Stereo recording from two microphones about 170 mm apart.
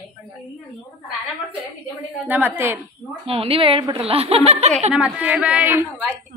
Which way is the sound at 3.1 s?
35° right (ahead or behind).